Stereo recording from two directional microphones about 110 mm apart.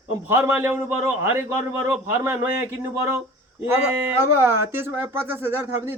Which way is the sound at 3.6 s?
20° right (ahead or behind).